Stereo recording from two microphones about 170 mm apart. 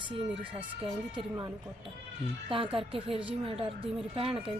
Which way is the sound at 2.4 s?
30° right (ahead or behind).